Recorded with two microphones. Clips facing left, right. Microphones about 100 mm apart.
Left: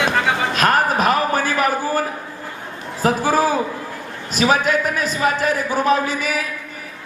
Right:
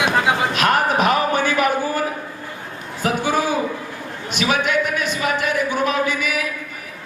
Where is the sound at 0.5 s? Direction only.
40° left (ahead or behind).